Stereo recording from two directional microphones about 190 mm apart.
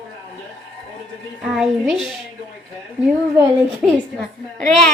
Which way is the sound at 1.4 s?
Centre (ahead or behind).